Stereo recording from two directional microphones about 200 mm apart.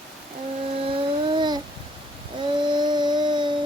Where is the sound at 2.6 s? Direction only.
20° right (ahead or behind).